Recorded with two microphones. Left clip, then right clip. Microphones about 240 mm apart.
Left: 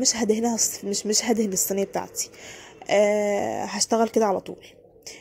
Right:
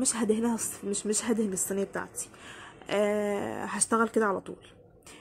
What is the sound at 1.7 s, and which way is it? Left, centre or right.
A woman's voice, centre.